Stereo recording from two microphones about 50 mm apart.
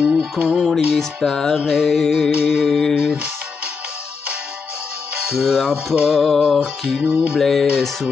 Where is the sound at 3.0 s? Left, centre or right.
Centre.